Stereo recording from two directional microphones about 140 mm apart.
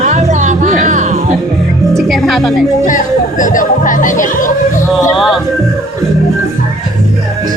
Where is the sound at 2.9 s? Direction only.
70° left (ahead or behind).